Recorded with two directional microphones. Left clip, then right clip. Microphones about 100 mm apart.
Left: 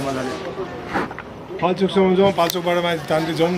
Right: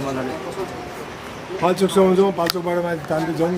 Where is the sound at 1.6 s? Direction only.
5° left (ahead or behind).